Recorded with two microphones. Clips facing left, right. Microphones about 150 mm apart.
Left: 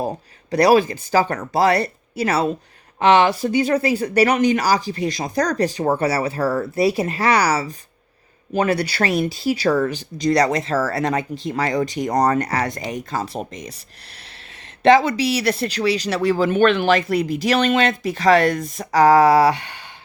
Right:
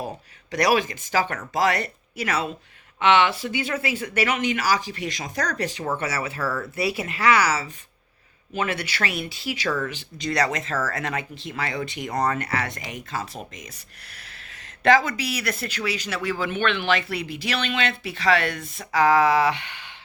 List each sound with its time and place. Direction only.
0.5 s speech: 35° left (ahead or behind)
14.8 s speech: 30° left (ahead or behind)